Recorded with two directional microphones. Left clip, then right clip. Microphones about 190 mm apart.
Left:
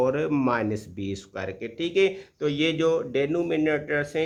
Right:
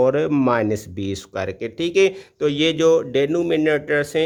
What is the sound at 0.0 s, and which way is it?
Speech, 35° right (ahead or behind).